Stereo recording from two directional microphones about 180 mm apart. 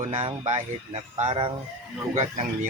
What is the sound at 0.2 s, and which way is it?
Speech, 30° right (ahead or behind).